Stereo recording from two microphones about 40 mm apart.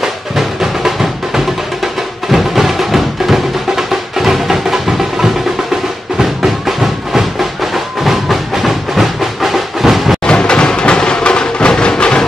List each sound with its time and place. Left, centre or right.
0.0 s music: centre
10.2 s music: left